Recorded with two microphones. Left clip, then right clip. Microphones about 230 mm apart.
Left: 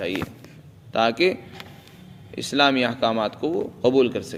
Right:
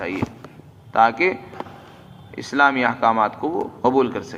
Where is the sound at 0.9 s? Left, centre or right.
Left.